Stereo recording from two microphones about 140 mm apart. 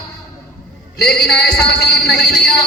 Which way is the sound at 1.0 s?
5° left (ahead or behind).